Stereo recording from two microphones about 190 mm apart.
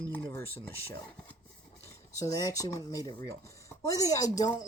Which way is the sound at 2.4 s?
20° left (ahead or behind).